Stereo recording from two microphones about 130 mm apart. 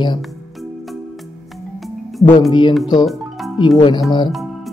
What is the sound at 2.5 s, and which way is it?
Speech, 35° left (ahead or behind).